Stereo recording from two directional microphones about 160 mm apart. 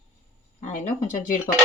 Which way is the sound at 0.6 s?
50° left (ahead or behind).